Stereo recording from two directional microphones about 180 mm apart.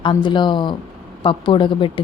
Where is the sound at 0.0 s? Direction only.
25° left (ahead or behind).